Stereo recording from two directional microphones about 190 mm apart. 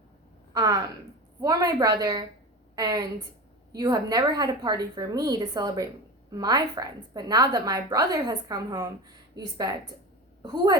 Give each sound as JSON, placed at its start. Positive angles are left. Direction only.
{"t": 0.5, "sound": "a woman's voice", "side_deg": -20}
{"t": 10.4, "sound": "a woman's voice", "side_deg": -20}